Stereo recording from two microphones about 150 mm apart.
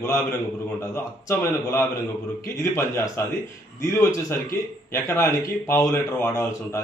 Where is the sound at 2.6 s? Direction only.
20° left (ahead or behind).